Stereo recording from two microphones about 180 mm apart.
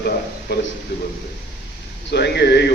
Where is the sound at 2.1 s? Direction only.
65° left (ahead or behind).